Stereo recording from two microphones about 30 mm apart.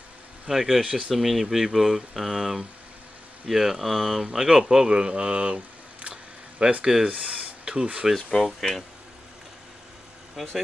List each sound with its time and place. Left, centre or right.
0.5 s speech: centre
0.8 s speech: right
1.1 s speech: centre
4.9 s speech: right
6.8 s speech: right
7.2 s a sound: right
8.4 s speech: centre
10.3 s speech: centre